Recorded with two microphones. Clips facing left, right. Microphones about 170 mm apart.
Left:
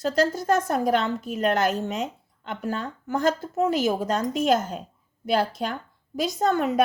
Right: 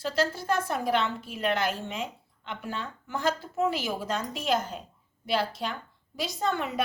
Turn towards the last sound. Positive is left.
turn(degrees=40)  # may be behind; listen again after turning